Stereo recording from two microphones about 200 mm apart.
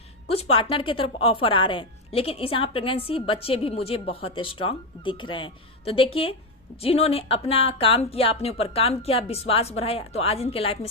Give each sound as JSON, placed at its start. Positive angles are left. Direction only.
{"t": 0.3, "sound": "a woman's voice", "side_deg": 30}